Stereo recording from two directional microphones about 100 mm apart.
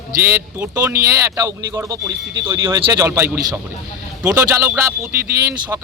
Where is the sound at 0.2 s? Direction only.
25° right (ahead or behind).